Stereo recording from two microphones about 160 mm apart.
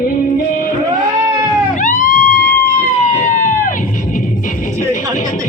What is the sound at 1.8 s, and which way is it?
Music, 55° left (ahead or behind).